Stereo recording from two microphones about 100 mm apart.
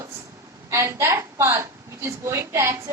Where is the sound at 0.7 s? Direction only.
25° right (ahead or behind).